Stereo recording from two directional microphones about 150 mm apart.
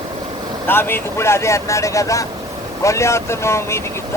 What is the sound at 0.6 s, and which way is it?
Speech, 15° left (ahead or behind).